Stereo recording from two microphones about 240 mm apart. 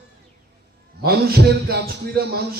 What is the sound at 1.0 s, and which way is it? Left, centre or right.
A man's voice, right.